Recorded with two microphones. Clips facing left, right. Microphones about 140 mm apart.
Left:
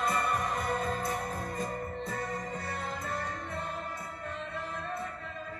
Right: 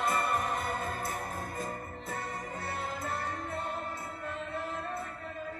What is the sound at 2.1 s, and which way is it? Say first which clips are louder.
Music: left 3 dB; 25° right (ahead or behind).